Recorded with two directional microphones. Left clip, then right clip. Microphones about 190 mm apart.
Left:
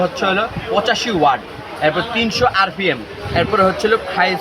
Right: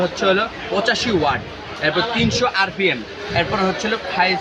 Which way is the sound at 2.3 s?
40° left (ahead or behind).